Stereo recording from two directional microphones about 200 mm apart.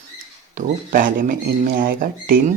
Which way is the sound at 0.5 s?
40° right (ahead or behind).